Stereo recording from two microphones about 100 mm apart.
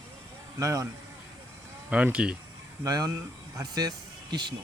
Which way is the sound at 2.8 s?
40° right (ahead or behind).